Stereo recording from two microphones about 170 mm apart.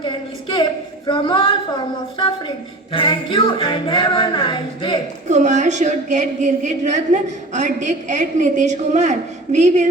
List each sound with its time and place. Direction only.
0.0 s a sound: 25° left (ahead or behind)
2.9 s speech: 30° left (ahead or behind)
5.3 s speech: 45° right (ahead or behind)